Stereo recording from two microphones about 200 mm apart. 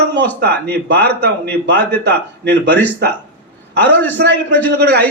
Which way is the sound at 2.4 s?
55° right (ahead or behind).